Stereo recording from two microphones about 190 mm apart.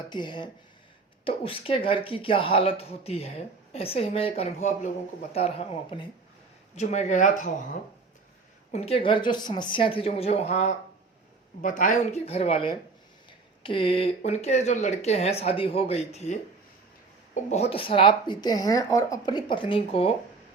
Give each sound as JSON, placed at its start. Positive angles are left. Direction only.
{"t": 0.1, "sound": "speech", "side_deg": 25}
{"t": 6.7, "sound": "speech", "side_deg": 40}
{"t": 8.7, "sound": "speech", "side_deg": 30}